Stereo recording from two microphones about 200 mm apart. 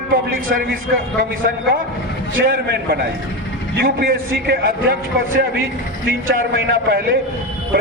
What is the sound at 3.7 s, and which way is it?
A man's voice, 50° right (ahead or behind).